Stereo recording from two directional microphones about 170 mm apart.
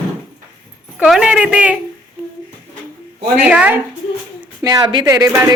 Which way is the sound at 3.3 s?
10° right (ahead or behind).